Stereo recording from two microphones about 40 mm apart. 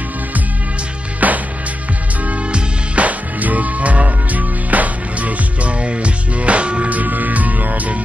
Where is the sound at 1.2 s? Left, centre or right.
Right.